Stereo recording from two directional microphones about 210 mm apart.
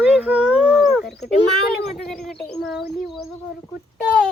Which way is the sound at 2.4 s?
Centre (ahead or behind).